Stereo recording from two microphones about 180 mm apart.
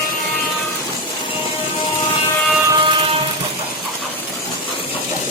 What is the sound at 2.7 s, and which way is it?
Vehicle, 25° right (ahead or behind).